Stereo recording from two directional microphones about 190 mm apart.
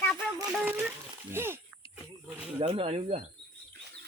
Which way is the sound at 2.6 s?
30° right (ahead or behind).